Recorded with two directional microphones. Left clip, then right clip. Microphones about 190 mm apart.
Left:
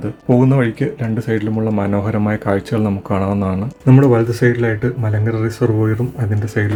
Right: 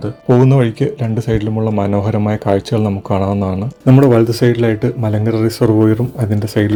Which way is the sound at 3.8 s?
45° right (ahead or behind).